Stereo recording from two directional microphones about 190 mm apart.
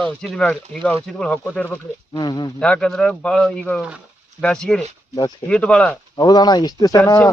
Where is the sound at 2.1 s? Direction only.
20° left (ahead or behind).